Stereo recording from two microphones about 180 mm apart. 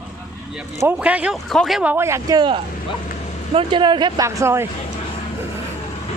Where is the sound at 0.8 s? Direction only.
10° right (ahead or behind).